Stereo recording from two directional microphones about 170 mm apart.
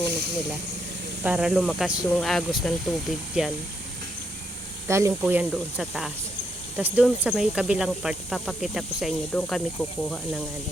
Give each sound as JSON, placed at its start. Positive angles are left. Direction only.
{"t": 0.0, "sound": "speech", "side_deg": -80}
{"t": 1.2, "sound": "speech", "side_deg": -5}
{"t": 4.9, "sound": "speech", "side_deg": -15}